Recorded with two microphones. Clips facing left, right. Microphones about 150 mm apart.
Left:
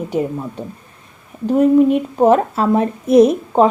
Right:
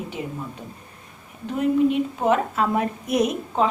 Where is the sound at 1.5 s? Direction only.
45° left (ahead or behind).